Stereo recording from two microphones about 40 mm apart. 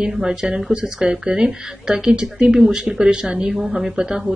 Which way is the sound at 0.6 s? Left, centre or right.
Centre.